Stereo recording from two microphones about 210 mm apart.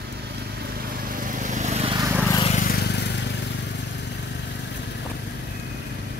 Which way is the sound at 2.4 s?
35° left (ahead or behind).